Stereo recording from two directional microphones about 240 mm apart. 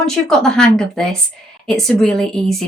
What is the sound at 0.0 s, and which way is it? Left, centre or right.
Speech, centre.